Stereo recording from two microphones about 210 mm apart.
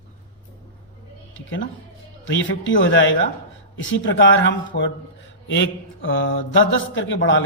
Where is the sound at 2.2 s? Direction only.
60° left (ahead or behind).